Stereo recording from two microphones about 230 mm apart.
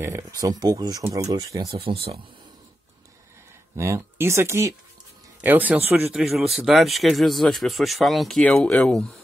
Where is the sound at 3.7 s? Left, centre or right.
Centre.